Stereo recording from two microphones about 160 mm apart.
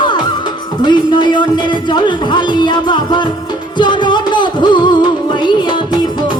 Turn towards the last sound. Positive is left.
turn(degrees=30)  # may be behind; listen again after turning